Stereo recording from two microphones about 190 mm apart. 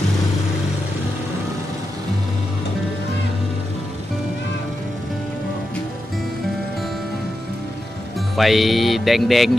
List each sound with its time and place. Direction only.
8.4 s music: centre (ahead or behind)